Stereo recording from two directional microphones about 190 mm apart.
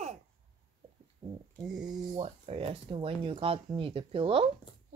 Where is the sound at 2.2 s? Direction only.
30° right (ahead or behind).